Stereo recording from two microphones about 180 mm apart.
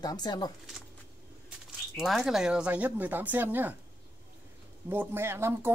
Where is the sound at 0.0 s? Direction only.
20° left (ahead or behind).